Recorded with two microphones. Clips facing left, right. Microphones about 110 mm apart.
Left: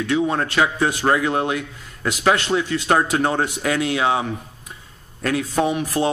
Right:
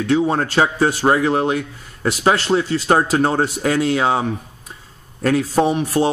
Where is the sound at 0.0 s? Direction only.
30° right (ahead or behind).